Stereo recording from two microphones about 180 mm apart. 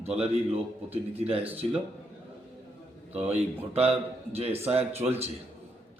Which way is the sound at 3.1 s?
35° right (ahead or behind).